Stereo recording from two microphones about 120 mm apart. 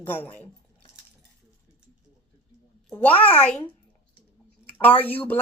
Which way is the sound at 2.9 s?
15° left (ahead or behind).